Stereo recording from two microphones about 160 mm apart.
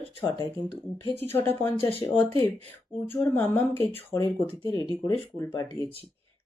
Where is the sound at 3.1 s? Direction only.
15° left (ahead or behind).